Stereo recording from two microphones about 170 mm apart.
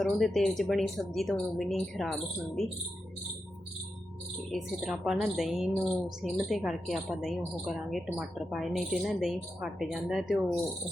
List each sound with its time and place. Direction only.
0.0 s speech: centre (ahead or behind)
4.5 s speech: centre (ahead or behind)